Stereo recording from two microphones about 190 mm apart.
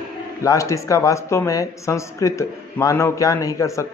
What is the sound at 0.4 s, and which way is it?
A man's voice, 15° left (ahead or behind).